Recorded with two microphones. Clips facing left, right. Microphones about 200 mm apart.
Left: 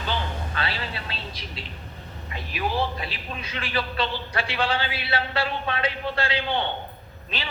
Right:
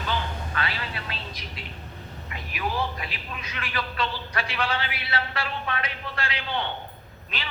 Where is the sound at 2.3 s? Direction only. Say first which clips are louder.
Left 3 dB; 30° left (ahead or behind).